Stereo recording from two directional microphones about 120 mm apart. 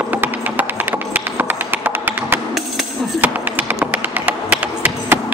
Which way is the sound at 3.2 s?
15° right (ahead or behind).